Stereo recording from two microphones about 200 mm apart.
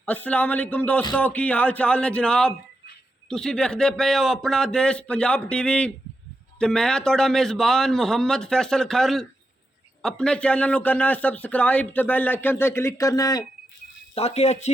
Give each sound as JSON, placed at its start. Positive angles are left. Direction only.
{"t": 0.0, "sound": "a man's voice", "side_deg": 5}
{"t": 14.2, "sound": "speech", "side_deg": 30}